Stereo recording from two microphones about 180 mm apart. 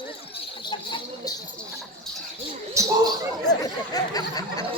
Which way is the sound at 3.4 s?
20° left (ahead or behind).